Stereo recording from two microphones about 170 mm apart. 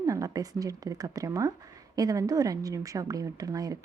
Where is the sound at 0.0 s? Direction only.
20° right (ahead or behind).